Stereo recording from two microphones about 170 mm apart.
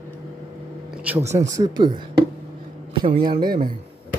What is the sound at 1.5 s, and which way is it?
Speech, 25° right (ahead or behind).